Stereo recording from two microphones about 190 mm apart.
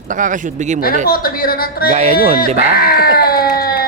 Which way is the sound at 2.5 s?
55° left (ahead or behind).